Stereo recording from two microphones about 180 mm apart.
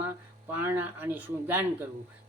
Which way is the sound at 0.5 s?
10° right (ahead or behind).